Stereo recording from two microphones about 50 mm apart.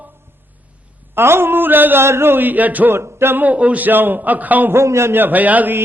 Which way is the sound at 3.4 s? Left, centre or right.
Right.